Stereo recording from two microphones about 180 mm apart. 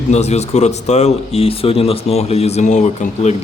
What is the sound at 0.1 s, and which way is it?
Speech, 35° left (ahead or behind).